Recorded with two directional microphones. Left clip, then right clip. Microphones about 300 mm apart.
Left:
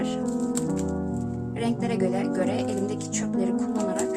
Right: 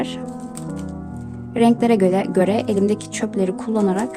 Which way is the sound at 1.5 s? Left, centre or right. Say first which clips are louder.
Right 12 dB; right.